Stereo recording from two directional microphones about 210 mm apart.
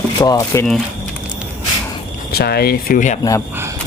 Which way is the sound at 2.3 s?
50° left (ahead or behind).